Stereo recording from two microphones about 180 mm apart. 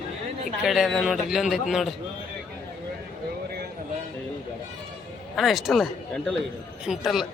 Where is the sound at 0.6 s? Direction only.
Centre (ahead or behind).